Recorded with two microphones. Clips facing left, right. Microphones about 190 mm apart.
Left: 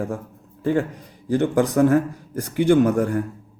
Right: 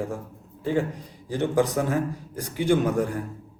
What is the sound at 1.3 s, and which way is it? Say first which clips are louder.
Speech: left 4 dB; 50° left (ahead or behind).